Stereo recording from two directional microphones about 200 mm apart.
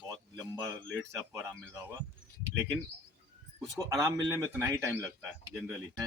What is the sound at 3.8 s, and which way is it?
Speech, 15° right (ahead or behind).